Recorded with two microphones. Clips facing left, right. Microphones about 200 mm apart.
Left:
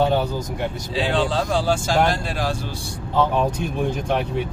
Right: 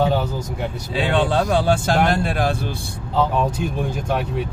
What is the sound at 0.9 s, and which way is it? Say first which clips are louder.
Speech: right 3 dB; 60° right (ahead or behind).